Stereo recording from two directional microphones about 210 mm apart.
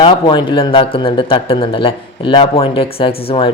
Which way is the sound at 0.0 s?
20° left (ahead or behind).